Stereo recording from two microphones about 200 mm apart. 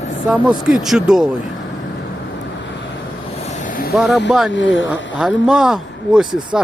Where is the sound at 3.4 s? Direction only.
35° left (ahead or behind).